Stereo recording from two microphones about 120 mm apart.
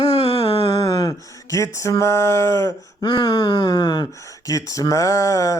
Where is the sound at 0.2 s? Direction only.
55° left (ahead or behind).